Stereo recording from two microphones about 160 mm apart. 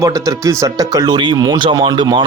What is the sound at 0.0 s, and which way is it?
Speech, 20° right (ahead or behind).